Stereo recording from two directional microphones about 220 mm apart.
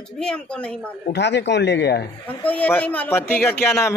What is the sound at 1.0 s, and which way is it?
Speech, 50° left (ahead or behind).